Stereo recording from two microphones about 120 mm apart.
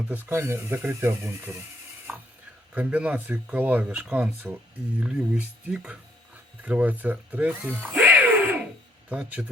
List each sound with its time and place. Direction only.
0.1 s speech: 20° right (ahead or behind)
2.1 s ratchet: 10° right (ahead or behind)
2.7 s speech: 10° right (ahead or behind)